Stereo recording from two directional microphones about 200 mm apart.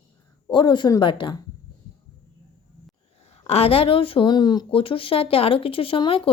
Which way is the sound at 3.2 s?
30° left (ahead or behind).